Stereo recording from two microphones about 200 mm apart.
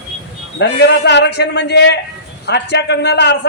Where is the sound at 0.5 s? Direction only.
60° left (ahead or behind).